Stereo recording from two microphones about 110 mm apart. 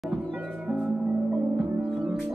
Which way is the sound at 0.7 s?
5° right (ahead or behind).